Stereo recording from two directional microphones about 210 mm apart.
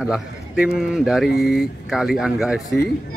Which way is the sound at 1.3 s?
50° left (ahead or behind).